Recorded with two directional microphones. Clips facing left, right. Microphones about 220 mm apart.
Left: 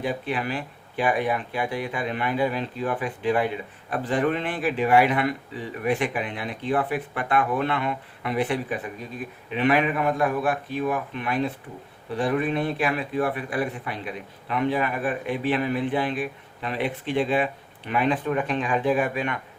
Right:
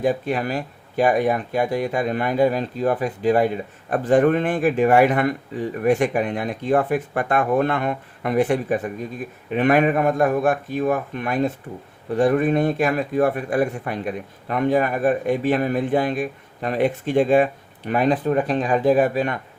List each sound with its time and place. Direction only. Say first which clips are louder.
0.0 s speech: right 6 dB; 45° right (ahead or behind)